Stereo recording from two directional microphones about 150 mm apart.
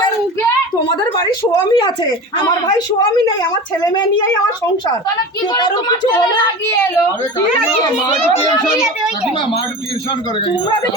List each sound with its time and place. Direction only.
1.7 s speech: 30° left (ahead or behind)
5.6 s speech: 25° left (ahead or behind)
8.6 s a child's voice: 5° right (ahead or behind)